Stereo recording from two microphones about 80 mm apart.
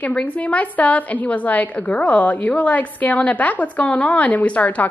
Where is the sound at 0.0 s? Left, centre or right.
Centre.